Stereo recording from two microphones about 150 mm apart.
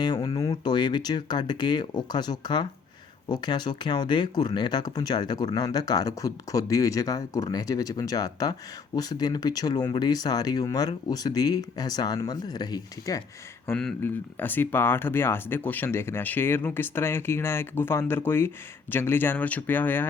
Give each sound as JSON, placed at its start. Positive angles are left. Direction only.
{"t": 0.0, "sound": "speech", "side_deg": 30}
{"t": 13.7, "sound": "speech", "side_deg": 10}